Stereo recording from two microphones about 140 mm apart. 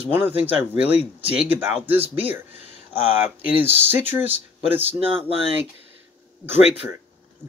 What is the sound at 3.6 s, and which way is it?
Speech, 15° right (ahead or behind).